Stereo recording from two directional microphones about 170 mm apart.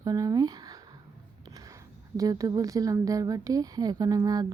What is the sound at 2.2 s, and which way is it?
Speech, 20° right (ahead or behind).